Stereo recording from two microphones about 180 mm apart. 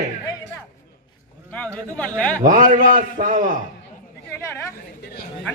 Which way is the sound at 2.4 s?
50° right (ahead or behind).